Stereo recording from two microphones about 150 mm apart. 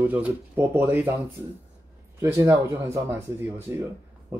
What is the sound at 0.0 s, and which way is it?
Speech, 10° right (ahead or behind).